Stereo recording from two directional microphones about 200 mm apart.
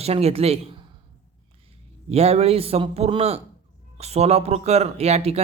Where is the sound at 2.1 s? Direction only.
30° right (ahead or behind).